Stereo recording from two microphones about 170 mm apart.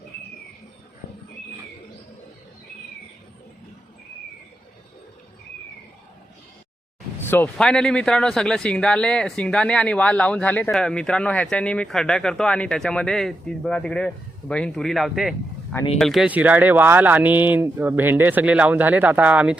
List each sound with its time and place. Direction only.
7.2 s a man's voice: 15° left (ahead or behind); by 19.5 s 5° right (ahead or behind)